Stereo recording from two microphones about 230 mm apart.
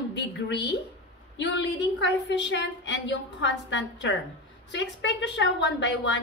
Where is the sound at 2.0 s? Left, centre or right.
Left.